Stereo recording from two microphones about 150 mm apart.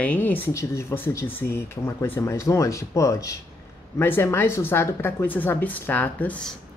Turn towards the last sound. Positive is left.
turn(degrees=10)  # may be behind; listen again after turning